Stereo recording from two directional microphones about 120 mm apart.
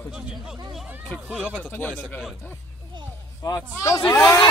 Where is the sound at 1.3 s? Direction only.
10° right (ahead or behind).